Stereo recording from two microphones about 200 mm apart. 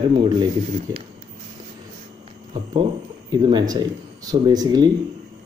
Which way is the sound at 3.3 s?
20° right (ahead or behind).